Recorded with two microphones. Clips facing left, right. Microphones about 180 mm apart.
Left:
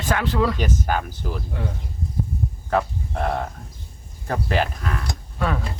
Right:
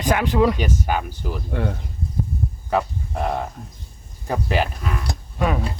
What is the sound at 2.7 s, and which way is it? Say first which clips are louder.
Speech: even; 10° right (ahead or behind).